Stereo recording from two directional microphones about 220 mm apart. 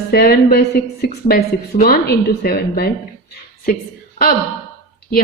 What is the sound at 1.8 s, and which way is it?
A woman's voice, 45° left (ahead or behind).